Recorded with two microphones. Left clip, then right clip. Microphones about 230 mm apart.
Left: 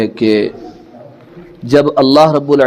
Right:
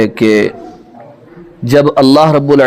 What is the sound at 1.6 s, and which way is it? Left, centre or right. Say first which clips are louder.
A man's voice: right 2 dB; right.